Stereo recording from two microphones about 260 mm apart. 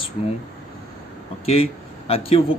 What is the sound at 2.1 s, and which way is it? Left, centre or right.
Speech, left.